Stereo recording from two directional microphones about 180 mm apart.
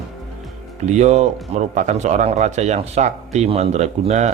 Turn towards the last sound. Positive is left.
turn(degrees=-40)  # may be behind; listen again after turning